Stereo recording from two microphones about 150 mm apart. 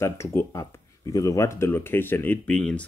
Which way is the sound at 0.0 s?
20° left (ahead or behind).